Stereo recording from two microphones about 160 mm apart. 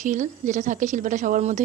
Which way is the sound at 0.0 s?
50° right (ahead or behind).